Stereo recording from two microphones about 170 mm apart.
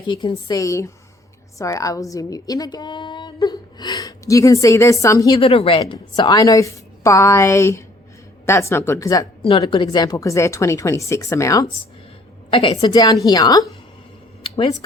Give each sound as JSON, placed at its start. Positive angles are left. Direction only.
{"t": 0.1, "sound": "a woman's voice", "side_deg": 30}
{"t": 9.4, "sound": "a woman's voice", "side_deg": 35}
{"t": 12.5, "sound": "a woman's voice", "side_deg": 30}